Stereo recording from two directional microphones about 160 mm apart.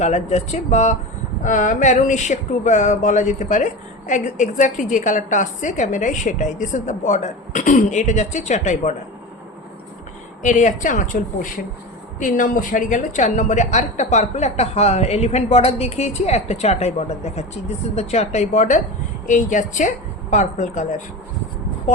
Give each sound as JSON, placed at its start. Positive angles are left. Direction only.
{"t": 0.0, "sound": "speech", "side_deg": 45}
{"t": 10.4, "sound": "speech", "side_deg": 50}